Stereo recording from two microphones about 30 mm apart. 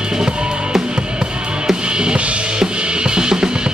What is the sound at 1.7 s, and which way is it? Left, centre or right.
Drum, right.